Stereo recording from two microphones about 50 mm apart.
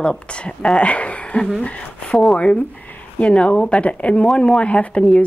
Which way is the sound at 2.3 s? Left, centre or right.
Left.